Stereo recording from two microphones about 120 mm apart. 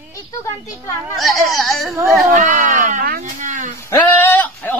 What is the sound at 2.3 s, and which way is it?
Baby cry, 90° right.